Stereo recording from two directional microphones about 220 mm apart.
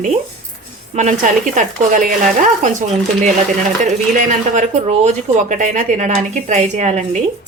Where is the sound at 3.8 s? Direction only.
35° right (ahead or behind).